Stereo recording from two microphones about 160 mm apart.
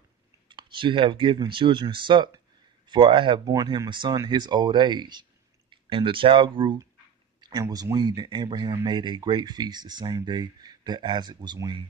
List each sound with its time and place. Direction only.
0.5 s speech: 30° right (ahead or behind)
7.3 s a sound: 25° right (ahead or behind)
7.6 s speech: 25° right (ahead or behind)